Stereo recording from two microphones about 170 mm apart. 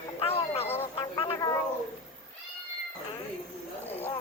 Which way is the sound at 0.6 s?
15° left (ahead or behind).